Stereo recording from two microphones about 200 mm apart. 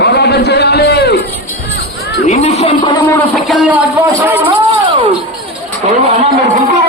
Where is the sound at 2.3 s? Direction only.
35° left (ahead or behind).